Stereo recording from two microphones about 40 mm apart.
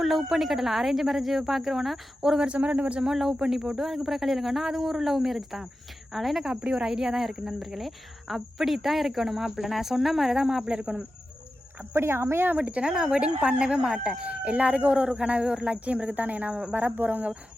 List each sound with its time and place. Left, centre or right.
0.0 s cricket: centre
2.6 s speech: right
3.1 s speech: centre
3.8 s cricket: centre
6.6 s speech: right
7.6 s cricket: centre
10.3 s speech: centre
11.8 s speech: right
12.5 s speech: right
12.8 s speech: centre
15.6 s speech: right